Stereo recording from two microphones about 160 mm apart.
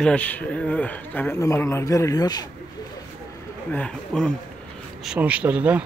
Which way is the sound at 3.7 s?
5° left (ahead or behind).